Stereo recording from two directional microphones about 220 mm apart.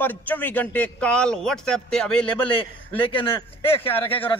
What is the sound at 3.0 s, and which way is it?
Speech, 20° left (ahead or behind).